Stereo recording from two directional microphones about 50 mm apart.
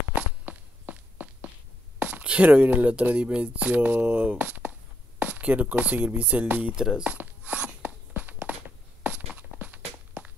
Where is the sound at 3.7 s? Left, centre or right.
Right.